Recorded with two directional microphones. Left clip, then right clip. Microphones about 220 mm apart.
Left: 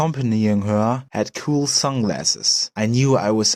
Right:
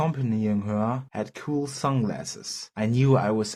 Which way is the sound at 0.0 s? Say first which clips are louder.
Left 6 dB; 40° left (ahead or behind).